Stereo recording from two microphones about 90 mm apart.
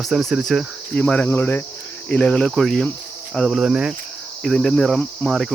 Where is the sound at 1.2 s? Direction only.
25° left (ahead or behind).